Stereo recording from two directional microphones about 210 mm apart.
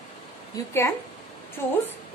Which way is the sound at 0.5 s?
15° left (ahead or behind).